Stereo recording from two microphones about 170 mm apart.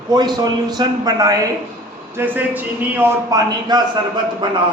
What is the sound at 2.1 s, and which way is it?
Speech, 10° right (ahead or behind).